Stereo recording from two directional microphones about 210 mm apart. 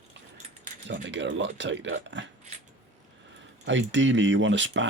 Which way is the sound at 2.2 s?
60° right (ahead or behind).